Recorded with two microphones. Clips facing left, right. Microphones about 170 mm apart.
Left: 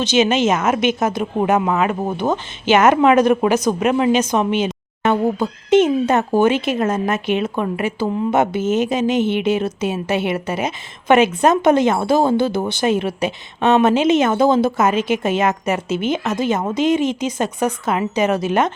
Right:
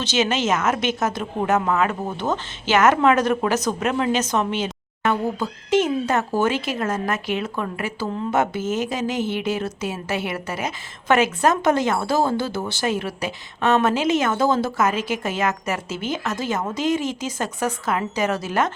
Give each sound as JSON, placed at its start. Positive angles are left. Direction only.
{"t": 0.0, "sound": "speech", "side_deg": 15}